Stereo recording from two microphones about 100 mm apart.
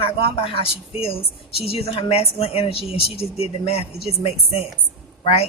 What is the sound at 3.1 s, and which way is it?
Speech, 90° left.